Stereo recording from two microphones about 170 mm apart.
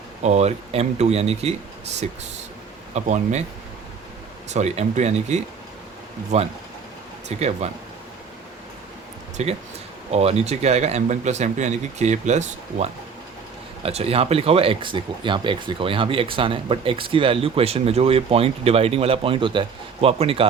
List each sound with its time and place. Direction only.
0.2 s speech: 40° right (ahead or behind)
2.9 s speech: 40° right (ahead or behind)
4.5 s speech: 40° right (ahead or behind)
9.4 s speech: 40° right (ahead or behind)